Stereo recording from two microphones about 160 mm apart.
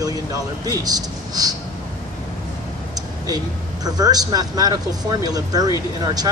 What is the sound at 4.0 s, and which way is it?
Speech, 25° right (ahead or behind).